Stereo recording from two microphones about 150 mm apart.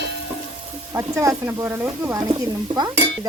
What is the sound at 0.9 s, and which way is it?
Speech, 20° right (ahead or behind).